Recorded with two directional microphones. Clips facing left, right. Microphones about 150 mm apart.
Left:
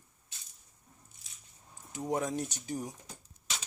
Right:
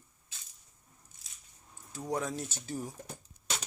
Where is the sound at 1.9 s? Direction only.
20° left (ahead or behind).